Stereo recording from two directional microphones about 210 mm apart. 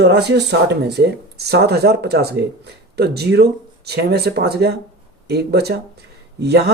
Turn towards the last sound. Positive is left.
turn(degrees=-50)  # may be behind; listen again after turning